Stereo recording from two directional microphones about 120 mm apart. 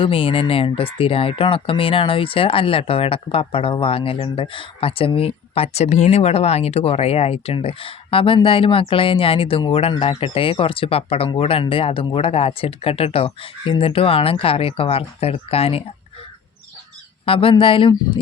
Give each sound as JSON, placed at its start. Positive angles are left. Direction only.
{"t": 0.0, "sound": "speech", "side_deg": 50}
{"t": 17.2, "sound": "speech", "side_deg": 50}